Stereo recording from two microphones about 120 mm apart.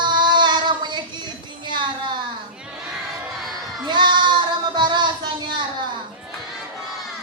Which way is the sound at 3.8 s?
40° right (ahead or behind).